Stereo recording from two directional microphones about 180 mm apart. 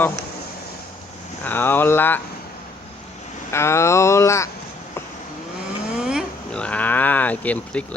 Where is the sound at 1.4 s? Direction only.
10° left (ahead or behind).